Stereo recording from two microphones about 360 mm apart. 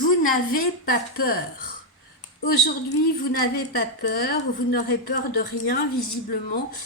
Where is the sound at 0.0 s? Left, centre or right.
Left.